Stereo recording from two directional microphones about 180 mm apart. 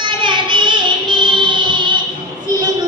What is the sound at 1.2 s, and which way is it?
Music, 25° right (ahead or behind).